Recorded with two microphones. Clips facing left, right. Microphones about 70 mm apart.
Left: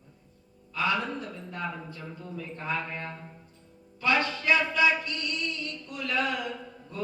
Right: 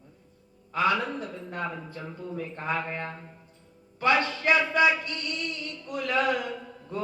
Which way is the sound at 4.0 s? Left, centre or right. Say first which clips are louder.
Right 3 dB; right.